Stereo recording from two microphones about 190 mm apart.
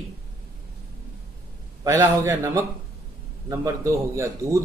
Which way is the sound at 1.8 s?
15° right (ahead or behind).